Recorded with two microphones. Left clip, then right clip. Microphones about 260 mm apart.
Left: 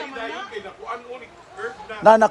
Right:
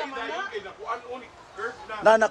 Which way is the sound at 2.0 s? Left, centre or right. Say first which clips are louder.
Left 5 dB; centre.